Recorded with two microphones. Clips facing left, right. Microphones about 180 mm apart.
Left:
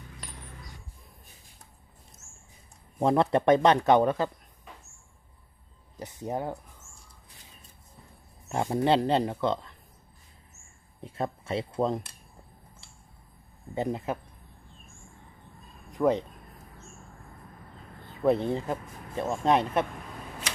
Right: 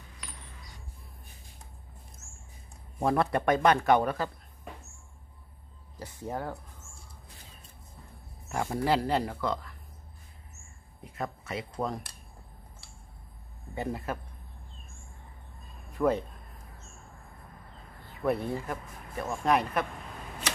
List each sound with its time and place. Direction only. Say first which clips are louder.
3.0 s speech: left 3 dB; 20° left (ahead or behind)
5.9 s speech: left 3 dB; 20° left (ahead or behind)
8.5 s speech: left 3 dB; 20° left (ahead or behind)
11.0 s speech: left 4 dB; 30° left (ahead or behind)
13.7 s speech: left 4 dB; 20° left (ahead or behind)
15.9 s speech: left 2 dB; 15° left (ahead or behind)
18.2 s speech: left 5 dB; 25° left (ahead or behind)